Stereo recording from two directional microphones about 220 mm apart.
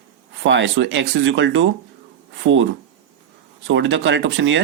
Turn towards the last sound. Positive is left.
turn(degrees=-60)  # may be behind; listen again after turning